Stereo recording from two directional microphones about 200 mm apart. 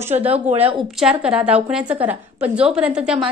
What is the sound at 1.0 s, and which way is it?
A woman's voice, 5° right (ahead or behind).